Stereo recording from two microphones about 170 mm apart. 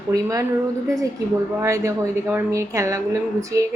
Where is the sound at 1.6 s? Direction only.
15° right (ahead or behind).